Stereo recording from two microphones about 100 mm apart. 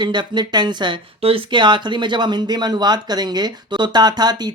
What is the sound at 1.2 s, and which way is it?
Speech, 60° right (ahead or behind).